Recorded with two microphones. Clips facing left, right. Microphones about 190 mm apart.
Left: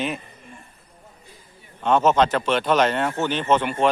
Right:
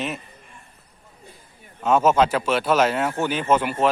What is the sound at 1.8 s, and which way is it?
Speech, 10° right (ahead or behind).